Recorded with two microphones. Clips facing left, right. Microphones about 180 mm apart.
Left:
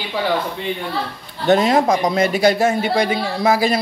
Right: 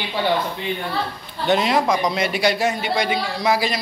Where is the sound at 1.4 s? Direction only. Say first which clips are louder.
Left 4 dB; 45° left (ahead or behind).